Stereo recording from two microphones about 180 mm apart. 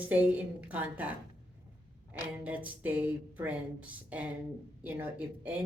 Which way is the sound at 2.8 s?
10° right (ahead or behind).